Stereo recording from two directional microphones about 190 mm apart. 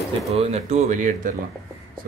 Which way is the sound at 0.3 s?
35° right (ahead or behind).